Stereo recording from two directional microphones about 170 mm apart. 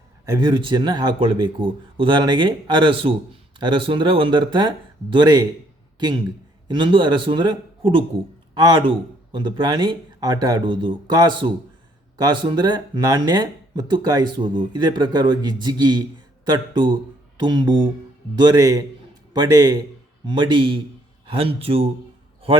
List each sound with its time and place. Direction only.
0.3 s speech: 25° right (ahead or behind)